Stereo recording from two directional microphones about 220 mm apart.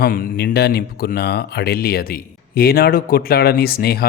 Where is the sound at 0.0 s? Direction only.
40° left (ahead or behind).